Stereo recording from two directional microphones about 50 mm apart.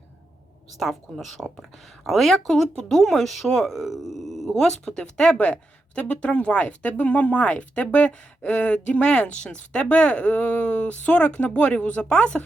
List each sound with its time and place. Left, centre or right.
0.8 s speech: centre
4.6 s speech: centre